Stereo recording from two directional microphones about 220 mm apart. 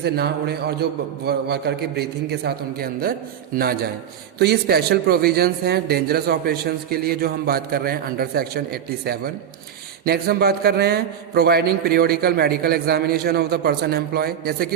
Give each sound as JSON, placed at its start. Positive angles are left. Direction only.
{"t": 0.0, "sound": "a man's voice", "side_deg": -45}